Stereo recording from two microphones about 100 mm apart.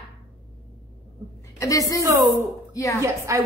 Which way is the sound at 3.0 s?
30° right (ahead or behind).